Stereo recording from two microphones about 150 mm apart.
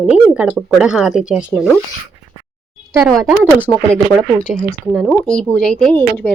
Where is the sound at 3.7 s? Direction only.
30° left (ahead or behind).